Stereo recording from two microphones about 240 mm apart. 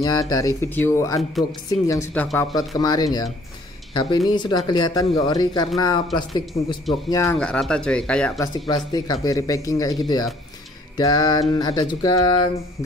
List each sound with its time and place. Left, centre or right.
0.0 s speech: centre
8.6 s speech: centre